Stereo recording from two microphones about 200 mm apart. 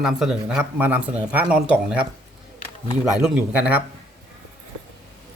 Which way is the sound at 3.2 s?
5° right (ahead or behind).